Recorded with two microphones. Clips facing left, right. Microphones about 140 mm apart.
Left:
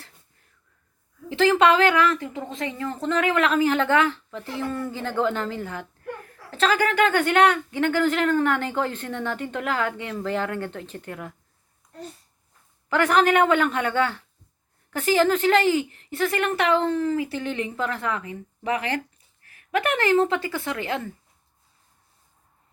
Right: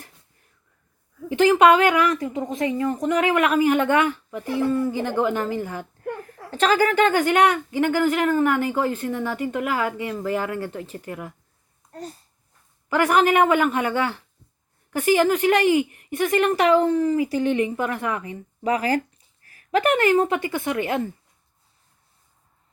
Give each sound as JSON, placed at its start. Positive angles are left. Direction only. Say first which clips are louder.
{"t": 1.3, "sound": "speech", "louder": "right 3 dB", "side_deg": -15}
{"t": 6.0, "sound": "a sound", "louder": "right 5 dB", "side_deg": -40}
{"t": 7.1, "sound": "speech", "louder": "right 1 dB", "side_deg": -10}
{"t": 11.8, "sound": "babbling", "louder": "right 6 dB", "side_deg": -30}
{"t": 12.9, "sound": "speech", "louder": "right 1 dB", "side_deg": -10}
{"t": 18.2, "sound": "speech", "louder": "right 3 dB", "side_deg": -35}
{"t": 19.5, "sound": "a sound", "louder": "right 4 dB", "side_deg": -35}
{"t": 20.1, "sound": "speech", "louder": "right 1 dB", "side_deg": -15}